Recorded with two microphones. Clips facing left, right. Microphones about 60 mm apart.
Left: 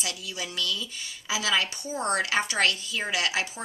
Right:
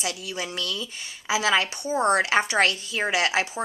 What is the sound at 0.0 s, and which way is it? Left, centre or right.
A woman's voice, right.